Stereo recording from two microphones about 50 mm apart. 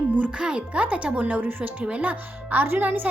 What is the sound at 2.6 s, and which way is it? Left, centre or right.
Speech, right.